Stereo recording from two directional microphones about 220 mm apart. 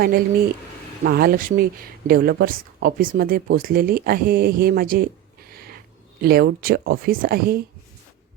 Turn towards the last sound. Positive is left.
turn(degrees=-45)  # may be behind; listen again after turning